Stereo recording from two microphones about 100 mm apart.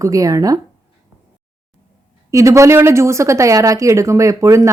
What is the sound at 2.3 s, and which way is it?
Speech, 30° right (ahead or behind).